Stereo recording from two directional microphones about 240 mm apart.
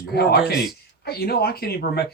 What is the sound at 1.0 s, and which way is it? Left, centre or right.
Speech, left.